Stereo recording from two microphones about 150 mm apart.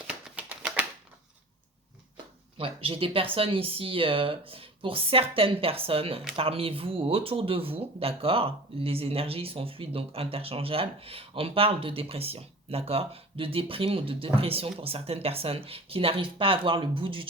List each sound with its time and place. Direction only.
0.1 s typewriter: 10° right (ahead or behind)
2.6 s speech: 40° right (ahead or behind)